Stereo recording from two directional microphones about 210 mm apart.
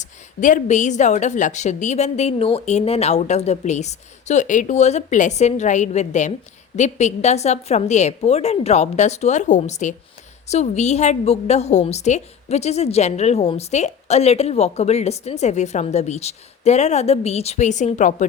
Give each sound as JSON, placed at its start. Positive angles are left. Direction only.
{"t": 0.0, "sound": "a woman's voice", "side_deg": 35}